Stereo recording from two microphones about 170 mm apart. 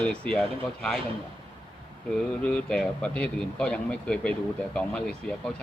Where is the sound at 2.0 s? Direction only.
5° left (ahead or behind).